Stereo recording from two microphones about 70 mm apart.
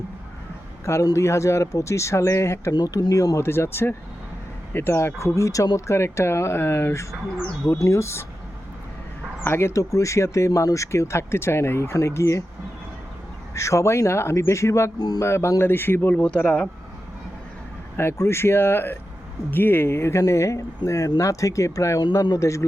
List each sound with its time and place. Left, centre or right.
1.1 s speech: left
2.7 s speech: left
9.4 s speech: left
13.5 s speech: left
14.9 s speech: left
15.2 s speech: left
17.9 s speech: left